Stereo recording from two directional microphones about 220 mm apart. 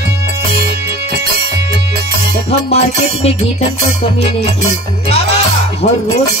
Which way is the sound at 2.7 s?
30° left (ahead or behind).